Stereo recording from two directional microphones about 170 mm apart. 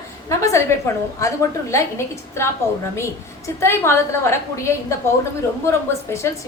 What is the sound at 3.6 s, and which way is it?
A woman's voice, 15° left (ahead or behind).